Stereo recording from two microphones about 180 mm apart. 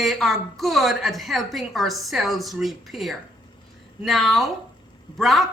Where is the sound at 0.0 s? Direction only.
Centre (ahead or behind).